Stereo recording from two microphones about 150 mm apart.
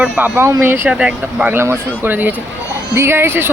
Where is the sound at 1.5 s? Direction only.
15° right (ahead or behind).